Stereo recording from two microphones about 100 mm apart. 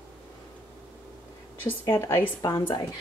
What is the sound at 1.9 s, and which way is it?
Speech, 25° left (ahead or behind).